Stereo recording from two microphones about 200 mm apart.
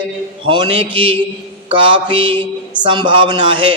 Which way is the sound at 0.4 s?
25° right (ahead or behind).